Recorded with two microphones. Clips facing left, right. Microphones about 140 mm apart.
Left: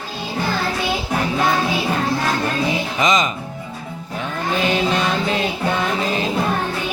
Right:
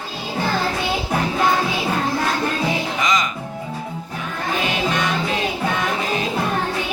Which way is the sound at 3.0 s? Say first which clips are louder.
Left 6 dB; 20° left (ahead or behind).